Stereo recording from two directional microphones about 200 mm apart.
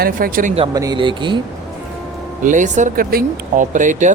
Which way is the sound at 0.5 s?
25° right (ahead or behind).